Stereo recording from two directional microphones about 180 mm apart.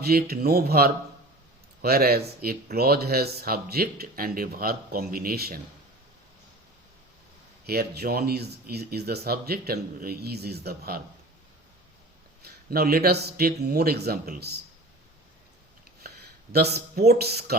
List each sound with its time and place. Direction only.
0.0 s speech: 60° right (ahead or behind)
7.7 s speech: 60° right (ahead or behind)
12.5 s speech: 60° right (ahead or behind)
16.0 s speech: 60° right (ahead or behind)